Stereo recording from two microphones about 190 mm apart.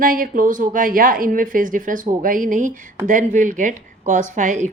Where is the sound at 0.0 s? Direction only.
45° right (ahead or behind).